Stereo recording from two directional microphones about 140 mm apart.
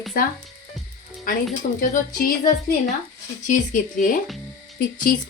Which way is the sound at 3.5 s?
65° left (ahead or behind).